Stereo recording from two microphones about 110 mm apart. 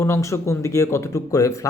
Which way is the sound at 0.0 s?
25° left (ahead or behind).